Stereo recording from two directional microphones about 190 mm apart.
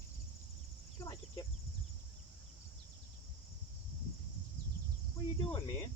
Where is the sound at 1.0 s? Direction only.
20° left (ahead or behind).